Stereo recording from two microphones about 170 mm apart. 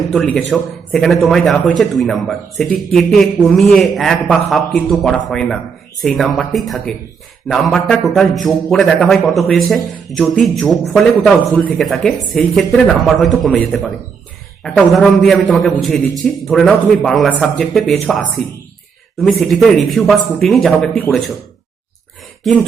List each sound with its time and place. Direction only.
0.1 s a man's voice: 5° left (ahead or behind)